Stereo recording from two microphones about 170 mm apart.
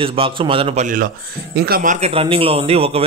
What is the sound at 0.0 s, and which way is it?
Speech, 30° right (ahead or behind).